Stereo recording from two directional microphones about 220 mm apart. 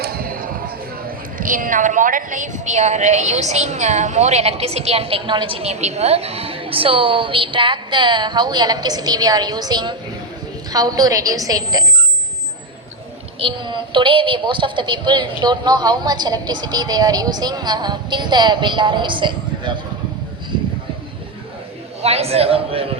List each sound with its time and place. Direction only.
0.0 s a sound: 40° right (ahead or behind)
1.4 s a woman's voice: 40° right (ahead or behind); by 11.9 s 15° right (ahead or behind)
13.4 s a woman's voice: 20° right (ahead or behind)
22.0 s a woman's voice: 30° right (ahead or behind)